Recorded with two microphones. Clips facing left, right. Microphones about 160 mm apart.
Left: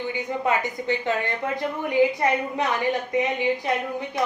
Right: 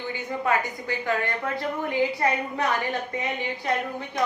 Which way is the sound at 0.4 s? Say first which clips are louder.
Left 1 dB; 20° left (ahead or behind).